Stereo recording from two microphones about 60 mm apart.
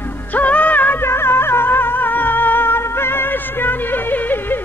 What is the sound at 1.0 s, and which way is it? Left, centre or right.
Music, left.